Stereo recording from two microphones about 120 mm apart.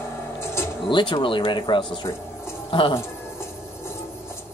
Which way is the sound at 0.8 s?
40° left (ahead or behind).